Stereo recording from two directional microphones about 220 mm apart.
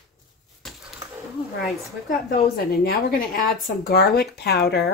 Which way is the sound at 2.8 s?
40° left (ahead or behind).